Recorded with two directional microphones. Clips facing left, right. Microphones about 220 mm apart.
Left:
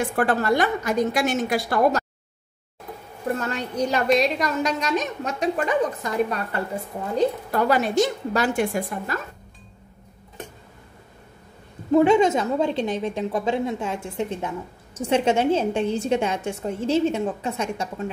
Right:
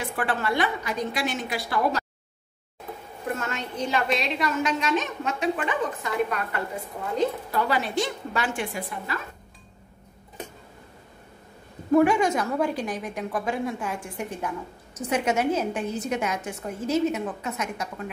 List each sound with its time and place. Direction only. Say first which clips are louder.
0.0 s a woman's voice: left 6 dB; 45° left (ahead or behind)
3.3 s a woman's voice: left 5 dB; 35° left (ahead or behind)
7.5 s a woman's voice: left 5 dB; 45° left (ahead or behind)
11.9 s a woman's voice: left 3 dB; 25° left (ahead or behind)